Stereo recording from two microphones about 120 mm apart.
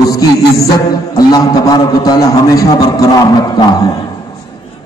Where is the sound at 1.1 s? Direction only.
30° left (ahead or behind).